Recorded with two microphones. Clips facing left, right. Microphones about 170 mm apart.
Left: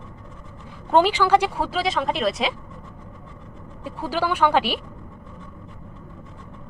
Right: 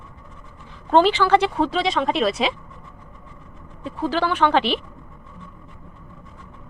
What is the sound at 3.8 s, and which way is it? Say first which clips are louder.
Speech: right 2 dB; 10° left (ahead or behind).